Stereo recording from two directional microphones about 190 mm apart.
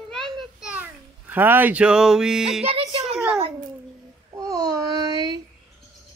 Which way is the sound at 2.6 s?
30° right (ahead or behind).